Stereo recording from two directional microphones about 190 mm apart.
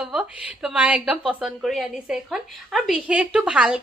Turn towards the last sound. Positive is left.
turn(degrees=-5)  # may be behind; listen again after turning